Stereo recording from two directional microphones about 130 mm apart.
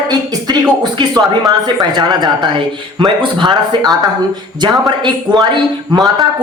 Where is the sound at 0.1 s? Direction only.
30° right (ahead or behind).